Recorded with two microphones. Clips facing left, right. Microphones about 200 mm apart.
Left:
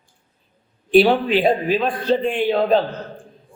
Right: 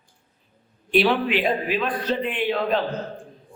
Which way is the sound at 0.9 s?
30° left (ahead or behind).